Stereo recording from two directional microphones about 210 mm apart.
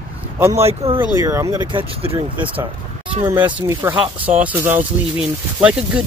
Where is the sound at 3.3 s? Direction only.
10° right (ahead or behind).